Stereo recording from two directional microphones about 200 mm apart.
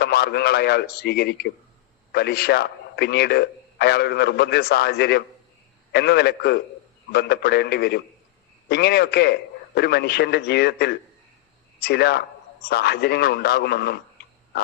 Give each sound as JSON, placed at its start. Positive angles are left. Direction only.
{"t": 0.0, "sound": "a man's voice", "side_deg": 55}